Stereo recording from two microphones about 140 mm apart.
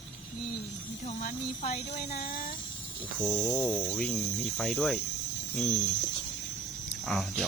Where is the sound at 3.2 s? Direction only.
5° left (ahead or behind).